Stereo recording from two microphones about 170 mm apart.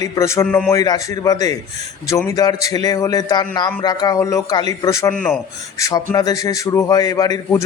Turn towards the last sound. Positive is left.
turn(degrees=20)  # may be behind; listen again after turning